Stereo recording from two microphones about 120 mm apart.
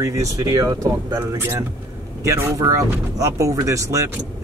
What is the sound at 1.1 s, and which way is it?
Speech, 20° right (ahead or behind).